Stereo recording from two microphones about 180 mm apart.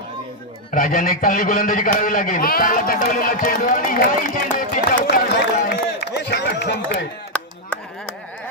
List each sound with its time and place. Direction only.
0.7 s a man's voice: 50° left (ahead or behind)
5.0 s a sound: 65° left (ahead or behind)
7.3 s chop: 5° left (ahead or behind)